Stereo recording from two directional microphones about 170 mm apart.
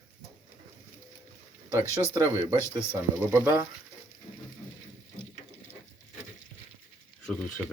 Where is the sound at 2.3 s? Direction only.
15° right (ahead or behind).